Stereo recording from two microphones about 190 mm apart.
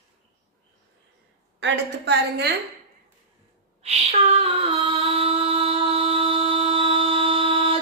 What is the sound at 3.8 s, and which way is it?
Female singing, 35° right (ahead or behind).